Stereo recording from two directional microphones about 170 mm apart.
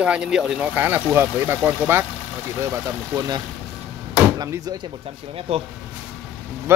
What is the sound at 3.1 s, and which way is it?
Speech, 25° right (ahead or behind).